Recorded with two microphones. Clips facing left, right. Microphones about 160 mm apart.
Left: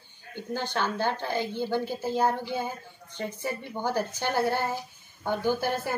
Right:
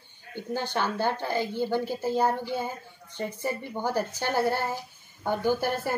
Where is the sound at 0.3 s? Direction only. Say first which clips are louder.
Right 1 dB; 15° right (ahead or behind).